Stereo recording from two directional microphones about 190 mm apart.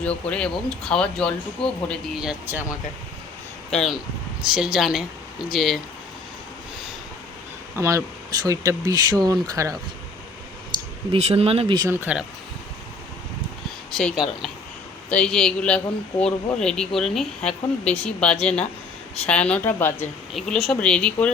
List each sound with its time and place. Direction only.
0.3 s speech: 5° left (ahead or behind)
3.7 s speech: centre (ahead or behind)
7.8 s speech: 15° right (ahead or behind)
11.1 s speech: 35° right (ahead or behind)
11.8 s speech: 10° right (ahead or behind)
13.9 s a woman's voice: centre (ahead or behind)